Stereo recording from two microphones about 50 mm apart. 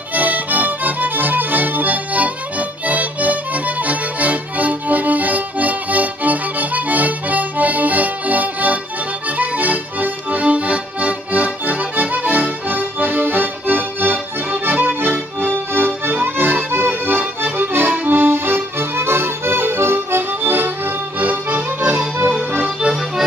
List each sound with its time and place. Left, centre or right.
0.1 s music: right
2.9 s accordion: right
17.4 s music: right
18.1 s accordion: right